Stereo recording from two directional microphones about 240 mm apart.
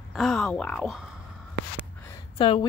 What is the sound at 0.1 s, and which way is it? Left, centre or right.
Speech, centre.